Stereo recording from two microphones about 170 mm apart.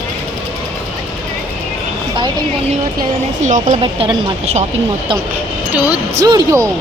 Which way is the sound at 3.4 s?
50° right (ahead or behind).